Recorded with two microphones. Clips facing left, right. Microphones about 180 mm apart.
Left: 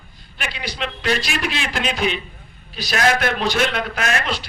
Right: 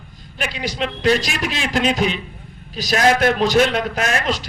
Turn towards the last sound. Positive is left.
turn(degrees=-40)  # may be behind; listen again after turning